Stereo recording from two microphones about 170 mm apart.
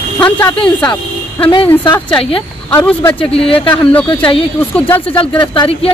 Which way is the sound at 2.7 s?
10° left (ahead or behind).